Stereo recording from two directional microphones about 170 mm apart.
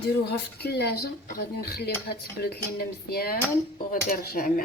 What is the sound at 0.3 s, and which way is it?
Speech, 70° left (ahead or behind).